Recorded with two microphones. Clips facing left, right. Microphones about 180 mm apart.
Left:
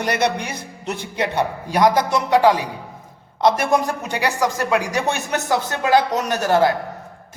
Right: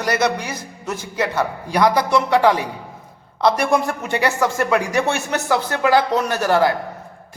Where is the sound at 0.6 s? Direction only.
65° left (ahead or behind).